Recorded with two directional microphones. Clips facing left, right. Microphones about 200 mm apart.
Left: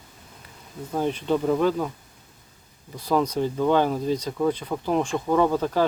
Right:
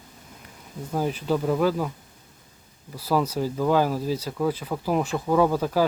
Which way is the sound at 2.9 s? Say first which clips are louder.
Left 1 dB; 5° right (ahead or behind).